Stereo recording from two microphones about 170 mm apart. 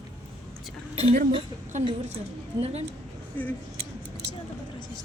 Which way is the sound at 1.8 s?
35° right (ahead or behind).